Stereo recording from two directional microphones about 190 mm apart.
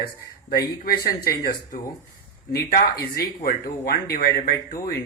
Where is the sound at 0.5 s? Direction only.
55° left (ahead or behind).